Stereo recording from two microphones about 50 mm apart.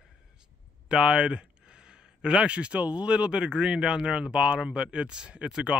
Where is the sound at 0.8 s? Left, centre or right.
Centre.